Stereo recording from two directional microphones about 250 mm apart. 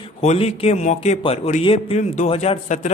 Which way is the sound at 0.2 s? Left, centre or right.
Left.